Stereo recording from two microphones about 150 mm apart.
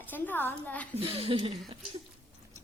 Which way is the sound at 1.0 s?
40° right (ahead or behind).